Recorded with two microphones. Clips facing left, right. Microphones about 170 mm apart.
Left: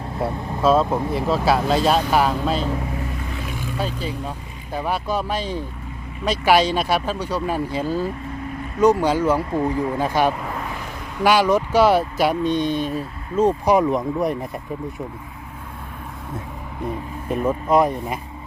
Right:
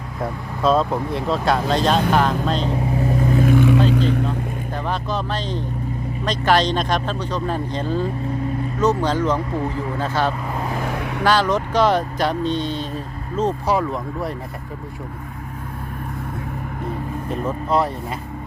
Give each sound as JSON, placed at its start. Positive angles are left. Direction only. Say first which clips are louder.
{"t": 0.2, "sound": "speech", "louder": "left 1 dB", "side_deg": 5}
{"t": 2.6, "sound": "vehicle", "louder": "right 5 dB", "side_deg": -30}
{"t": 4.9, "sound": "speech", "louder": "left 2 dB", "side_deg": 10}
{"t": 10.9, "sound": "vehicle", "louder": "right 8 dB", "side_deg": -70}
{"t": 11.2, "sound": "speech", "louder": "left 2 dB", "side_deg": 10}
{"t": 17.2, "sound": "speech", "louder": "left 4 dB", "side_deg": 15}